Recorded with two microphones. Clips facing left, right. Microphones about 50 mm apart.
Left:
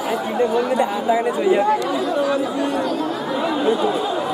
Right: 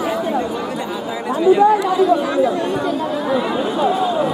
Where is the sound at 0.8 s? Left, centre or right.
Left.